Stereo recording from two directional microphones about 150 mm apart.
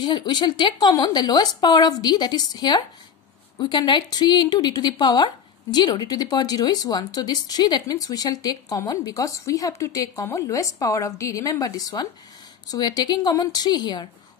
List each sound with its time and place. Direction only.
0.0 s speech: 30° left (ahead or behind)